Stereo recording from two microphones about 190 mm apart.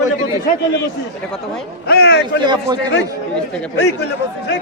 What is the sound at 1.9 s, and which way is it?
Speech, 60° left (ahead or behind).